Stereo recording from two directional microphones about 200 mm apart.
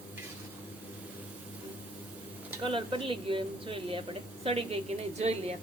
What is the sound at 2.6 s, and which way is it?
A woman's voice, 25° right (ahead or behind).